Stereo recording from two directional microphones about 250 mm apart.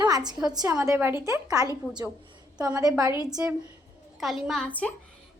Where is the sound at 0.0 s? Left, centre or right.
Centre.